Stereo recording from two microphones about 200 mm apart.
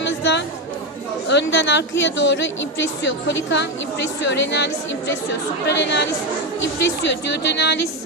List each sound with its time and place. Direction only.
0.0 s chatter: 60° left (ahead or behind)
1.3 s a woman's voice: 60° left (ahead or behind)
7.4 s a woman's voice: 60° left (ahead or behind)